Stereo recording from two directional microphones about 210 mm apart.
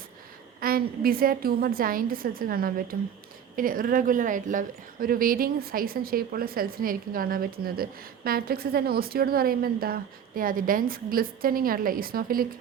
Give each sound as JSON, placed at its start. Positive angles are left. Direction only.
{"t": 0.6, "sound": "a woman's voice", "side_deg": -45}